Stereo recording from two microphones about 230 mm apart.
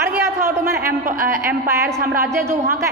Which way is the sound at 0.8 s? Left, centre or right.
Right.